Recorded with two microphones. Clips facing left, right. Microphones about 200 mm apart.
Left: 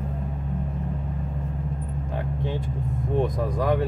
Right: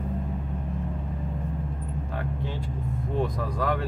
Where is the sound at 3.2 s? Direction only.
20° left (ahead or behind).